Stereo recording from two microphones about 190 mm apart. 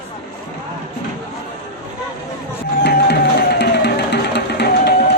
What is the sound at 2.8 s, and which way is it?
Music, 60° left (ahead or behind).